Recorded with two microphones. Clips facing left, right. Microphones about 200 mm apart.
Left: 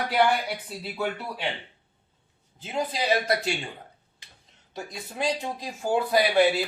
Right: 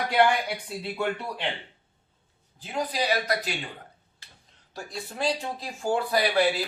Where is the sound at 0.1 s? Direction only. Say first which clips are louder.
Right 1 dB; 5° left (ahead or behind).